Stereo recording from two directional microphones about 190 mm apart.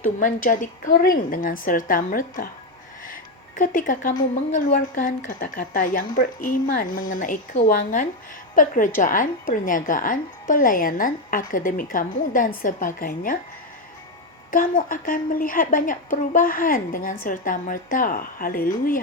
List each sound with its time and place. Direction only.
0.0 s a woman's voice: 45° left (ahead or behind)
14.5 s a woman's voice: 45° left (ahead or behind)